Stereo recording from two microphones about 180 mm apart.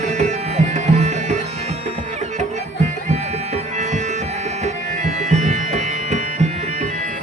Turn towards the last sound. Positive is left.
turn(degrees=-40)  # may be behind; listen again after turning